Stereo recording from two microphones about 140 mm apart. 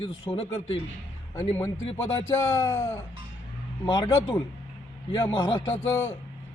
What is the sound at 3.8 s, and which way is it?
Speech, 30° left (ahead or behind).